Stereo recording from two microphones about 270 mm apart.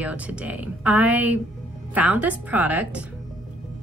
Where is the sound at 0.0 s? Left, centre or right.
Centre.